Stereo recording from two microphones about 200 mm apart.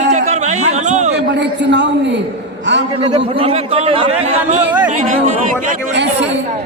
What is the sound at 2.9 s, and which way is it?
A man's voice, 25° right (ahead or behind).